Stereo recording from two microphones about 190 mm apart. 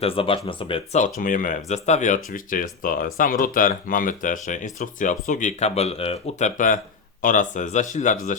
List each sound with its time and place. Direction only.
0.0 s speech: 30° left (ahead or behind)
1.0 s speech: 45° left (ahead or behind)
7.2 s speech: 45° left (ahead or behind)